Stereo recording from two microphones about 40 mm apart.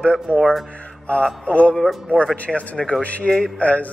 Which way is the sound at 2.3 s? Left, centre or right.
Left.